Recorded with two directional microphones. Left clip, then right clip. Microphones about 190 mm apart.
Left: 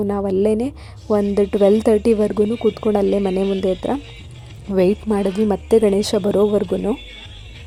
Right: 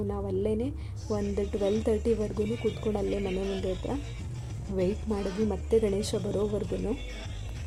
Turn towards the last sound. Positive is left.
turn(degrees=45)  # may be behind; listen again after turning